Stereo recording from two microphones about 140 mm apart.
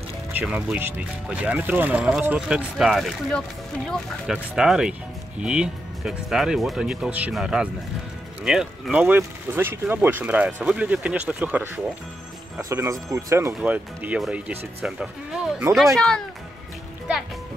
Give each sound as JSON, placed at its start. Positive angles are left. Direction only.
{"t": 0.3, "sound": "speech", "side_deg": -10}
{"t": 13.6, "sound": "speech", "side_deg": -10}